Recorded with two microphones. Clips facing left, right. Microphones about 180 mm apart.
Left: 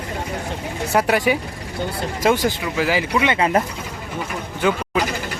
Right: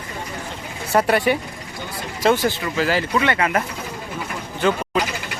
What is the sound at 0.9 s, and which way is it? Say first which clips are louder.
Speech: right 1 dB; 10° left (ahead or behind).